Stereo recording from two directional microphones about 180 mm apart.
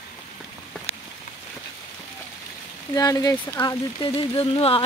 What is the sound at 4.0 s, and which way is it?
Speech, 30° left (ahead or behind).